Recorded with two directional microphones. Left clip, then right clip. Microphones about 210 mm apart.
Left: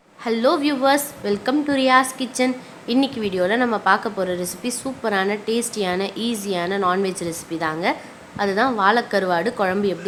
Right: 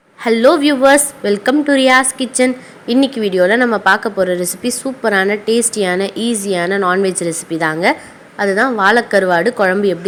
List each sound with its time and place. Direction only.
0.3 s a woman's voice: 20° right (ahead or behind)